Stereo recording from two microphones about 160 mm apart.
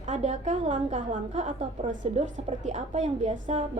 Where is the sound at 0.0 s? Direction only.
45° right (ahead or behind).